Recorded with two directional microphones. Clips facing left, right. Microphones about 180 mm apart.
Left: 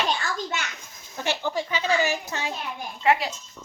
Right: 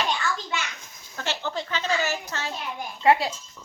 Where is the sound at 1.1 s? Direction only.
15° left (ahead or behind).